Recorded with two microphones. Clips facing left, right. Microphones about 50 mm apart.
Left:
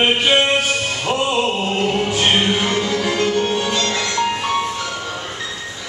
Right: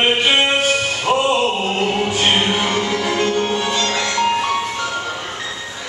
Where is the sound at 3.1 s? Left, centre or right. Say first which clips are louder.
Even; centre.